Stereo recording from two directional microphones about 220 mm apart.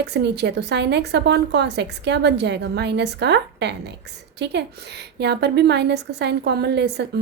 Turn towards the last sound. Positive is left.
turn(degrees=-50)  # may be behind; listen again after turning